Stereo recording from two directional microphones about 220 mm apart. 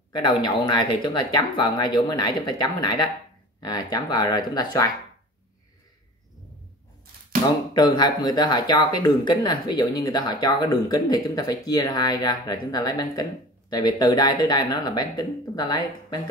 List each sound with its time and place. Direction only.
0.1 s speech: 20° left (ahead or behind)
7.7 s speech: 20° left (ahead or behind)